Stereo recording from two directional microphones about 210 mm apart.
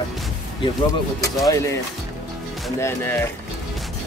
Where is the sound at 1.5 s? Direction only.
15° left (ahead or behind).